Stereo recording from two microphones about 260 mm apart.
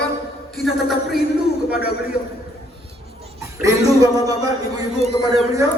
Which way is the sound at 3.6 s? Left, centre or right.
Centre.